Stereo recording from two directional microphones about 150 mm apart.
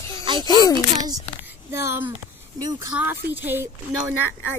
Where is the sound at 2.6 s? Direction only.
25° right (ahead or behind).